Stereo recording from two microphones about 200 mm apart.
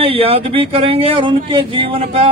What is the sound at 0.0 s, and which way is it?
A man's voice, 30° right (ahead or behind).